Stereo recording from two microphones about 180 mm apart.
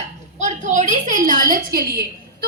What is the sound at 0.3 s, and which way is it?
A woman's voice, 40° right (ahead or behind).